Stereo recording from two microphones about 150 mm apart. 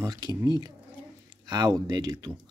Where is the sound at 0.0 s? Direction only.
25° right (ahead or behind).